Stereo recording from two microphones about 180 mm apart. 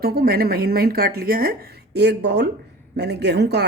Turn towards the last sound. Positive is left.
turn(degrees=-65)  # may be behind; listen again after turning